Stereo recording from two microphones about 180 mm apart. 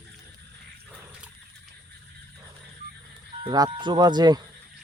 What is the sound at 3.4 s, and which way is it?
Speech, 25° right (ahead or behind).